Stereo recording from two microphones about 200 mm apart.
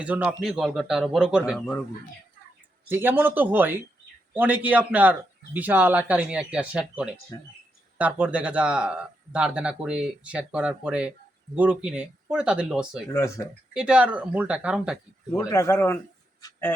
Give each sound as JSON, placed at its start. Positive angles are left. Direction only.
{"t": 0.0, "sound": "a man's voice", "side_deg": -5}
{"t": 2.9, "sound": "speech", "side_deg": -10}
{"t": 7.3, "sound": "speech", "side_deg": 15}
{"t": 7.9, "sound": "a man's voice", "side_deg": -5}
{"t": 13.1, "sound": "speech", "side_deg": 15}
{"t": 13.7, "sound": "a man's voice", "side_deg": -5}
{"t": 15.3, "sound": "speech", "side_deg": 15}